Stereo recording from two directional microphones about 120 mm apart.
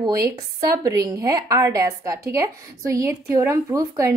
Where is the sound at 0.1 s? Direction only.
30° right (ahead or behind).